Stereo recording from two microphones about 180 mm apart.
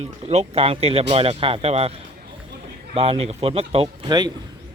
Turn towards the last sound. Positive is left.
turn(degrees=-20)  # may be behind; listen again after turning